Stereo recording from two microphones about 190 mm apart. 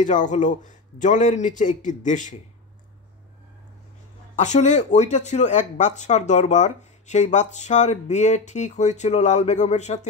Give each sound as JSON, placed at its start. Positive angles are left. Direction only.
{"t": 0.0, "sound": "speech", "side_deg": 40}
{"t": 4.4, "sound": "speech", "side_deg": 40}